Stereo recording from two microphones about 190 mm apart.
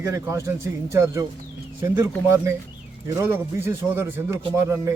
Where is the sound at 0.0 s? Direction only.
15° right (ahead or behind).